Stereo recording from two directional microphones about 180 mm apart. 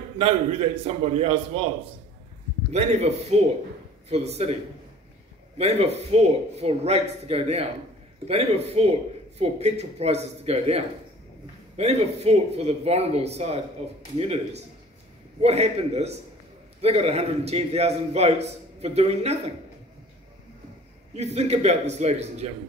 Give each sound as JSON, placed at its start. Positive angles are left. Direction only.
{"t": 0.2, "sound": "a man's voice", "side_deg": -35}
{"t": 2.7, "sound": "a man's voice", "side_deg": -35}
{"t": 5.6, "sound": "a man's voice", "side_deg": -35}
{"t": 15.4, "sound": "a man's voice", "side_deg": -35}
{"t": 21.1, "sound": "a man's voice", "side_deg": -40}